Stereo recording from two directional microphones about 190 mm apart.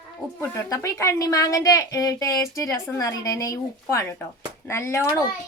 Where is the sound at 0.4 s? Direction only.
15° left (ahead or behind).